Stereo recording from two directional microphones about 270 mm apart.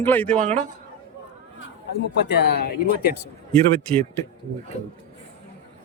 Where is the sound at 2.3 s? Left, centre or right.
Left.